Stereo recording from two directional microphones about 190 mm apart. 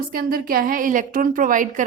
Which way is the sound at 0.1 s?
50° right (ahead or behind).